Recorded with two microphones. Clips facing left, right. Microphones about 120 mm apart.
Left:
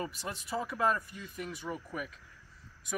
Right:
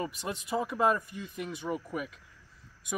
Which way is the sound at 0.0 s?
20° right (ahead or behind).